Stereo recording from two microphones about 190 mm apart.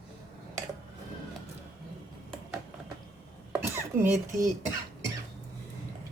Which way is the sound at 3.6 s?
15° right (ahead or behind).